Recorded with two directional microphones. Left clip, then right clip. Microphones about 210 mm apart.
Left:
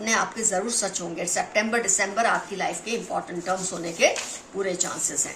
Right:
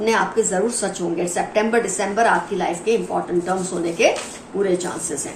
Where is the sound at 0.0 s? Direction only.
40° left (ahead or behind).